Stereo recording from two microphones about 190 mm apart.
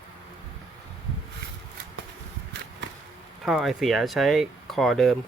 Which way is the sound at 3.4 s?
Centre (ahead or behind).